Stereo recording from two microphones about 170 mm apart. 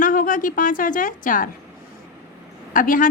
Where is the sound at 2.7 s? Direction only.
50° left (ahead or behind).